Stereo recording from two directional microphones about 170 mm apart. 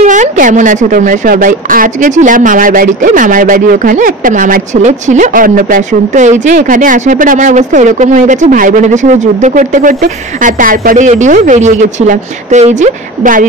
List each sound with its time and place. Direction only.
0.0 s a woman's voice: 45° right (ahead or behind)